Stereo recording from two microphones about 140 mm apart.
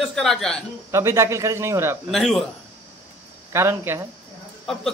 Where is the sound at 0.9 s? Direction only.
20° right (ahead or behind).